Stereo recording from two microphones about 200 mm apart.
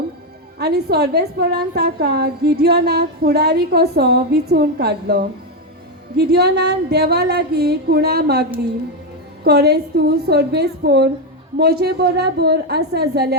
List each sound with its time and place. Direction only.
0.6 s a woman's voice: 55° right (ahead or behind)